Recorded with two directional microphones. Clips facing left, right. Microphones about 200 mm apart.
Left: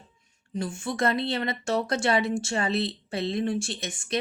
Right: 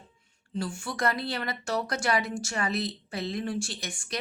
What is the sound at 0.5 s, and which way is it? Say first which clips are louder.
Speech: left 3 dB; 20° left (ahead or behind).